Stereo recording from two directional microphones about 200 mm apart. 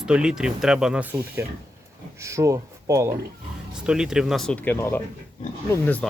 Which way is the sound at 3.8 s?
5° right (ahead or behind).